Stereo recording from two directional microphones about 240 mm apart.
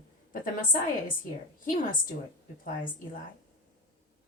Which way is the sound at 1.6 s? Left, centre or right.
Left.